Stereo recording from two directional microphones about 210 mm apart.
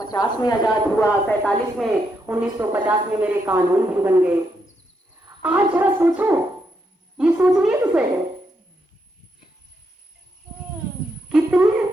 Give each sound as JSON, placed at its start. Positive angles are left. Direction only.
{"t": 0.1, "sound": "speech", "side_deg": 20}
{"t": 1.8, "sound": "a woman's voice", "side_deg": -5}
{"t": 5.4, "sound": "a woman's voice", "side_deg": -5}
{"t": 11.3, "sound": "a sound", "side_deg": -5}